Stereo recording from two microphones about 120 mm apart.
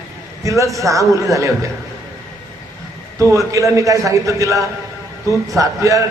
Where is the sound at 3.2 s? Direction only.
25° right (ahead or behind).